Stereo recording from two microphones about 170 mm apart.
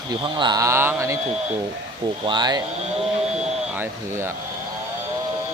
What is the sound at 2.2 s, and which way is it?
Speech, 25° right (ahead or behind).